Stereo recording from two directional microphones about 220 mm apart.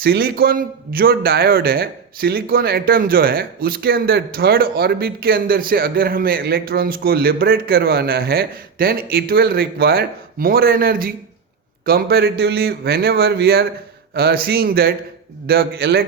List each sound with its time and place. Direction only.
0.0 s a man's voice: 45° right (ahead or behind)